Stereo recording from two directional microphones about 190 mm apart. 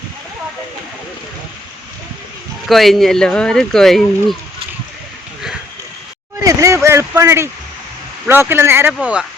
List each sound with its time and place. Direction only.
2.6 s speech: centre (ahead or behind)
6.4 s a sound: 15° right (ahead or behind)
6.8 s speech: 15° right (ahead or behind)